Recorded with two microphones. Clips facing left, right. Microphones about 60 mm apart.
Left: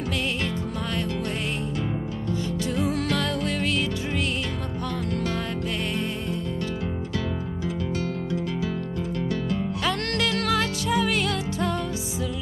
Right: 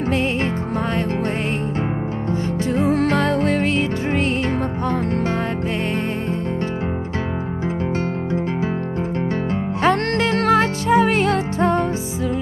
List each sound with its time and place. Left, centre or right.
2.6 s music: right
9.8 s music: right